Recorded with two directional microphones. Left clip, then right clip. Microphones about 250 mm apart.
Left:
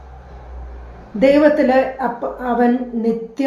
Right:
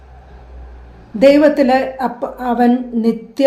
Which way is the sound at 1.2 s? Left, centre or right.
Right.